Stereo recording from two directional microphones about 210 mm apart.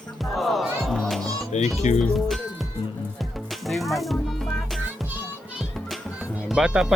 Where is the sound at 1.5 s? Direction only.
30° left (ahead or behind).